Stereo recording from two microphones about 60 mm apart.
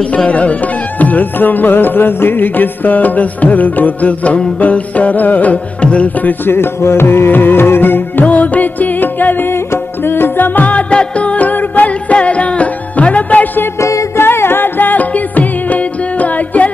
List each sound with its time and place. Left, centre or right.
0.1 s music: left
6.4 s music: left
13.7 s music: left
14.1 s music: left